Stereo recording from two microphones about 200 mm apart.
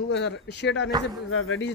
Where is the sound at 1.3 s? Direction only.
85° left.